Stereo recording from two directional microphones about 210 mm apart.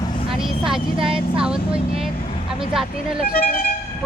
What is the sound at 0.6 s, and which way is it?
Speech, 5° right (ahead or behind).